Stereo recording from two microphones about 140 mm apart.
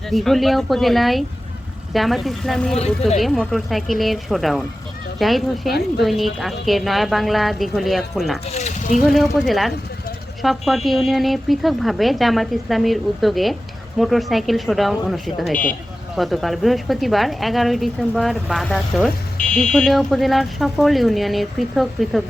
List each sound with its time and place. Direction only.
0.1 s speech: centre (ahead or behind)
8.5 s a sound: 55° left (ahead or behind)
9.0 s speech: centre (ahead or behind)